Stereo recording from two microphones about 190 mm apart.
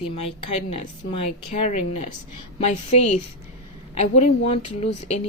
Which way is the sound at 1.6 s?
40° left (ahead or behind).